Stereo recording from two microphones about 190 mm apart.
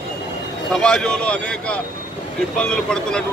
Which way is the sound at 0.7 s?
5° left (ahead or behind).